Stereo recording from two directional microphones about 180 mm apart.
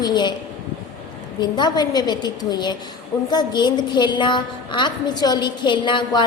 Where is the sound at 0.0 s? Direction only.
25° left (ahead or behind).